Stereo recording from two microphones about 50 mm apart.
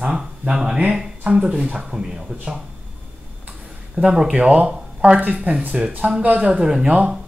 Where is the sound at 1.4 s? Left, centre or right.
Right.